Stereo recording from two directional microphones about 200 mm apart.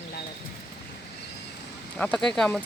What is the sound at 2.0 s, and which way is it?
Speech, 5° left (ahead or behind).